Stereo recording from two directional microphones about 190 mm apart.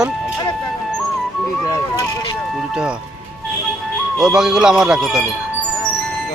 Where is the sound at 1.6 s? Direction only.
15° left (ahead or behind).